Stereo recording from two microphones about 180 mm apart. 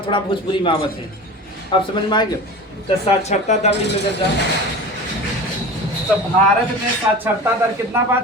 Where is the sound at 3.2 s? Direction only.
40° left (ahead or behind).